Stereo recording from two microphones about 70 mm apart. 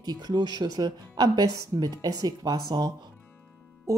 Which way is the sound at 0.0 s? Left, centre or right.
Right.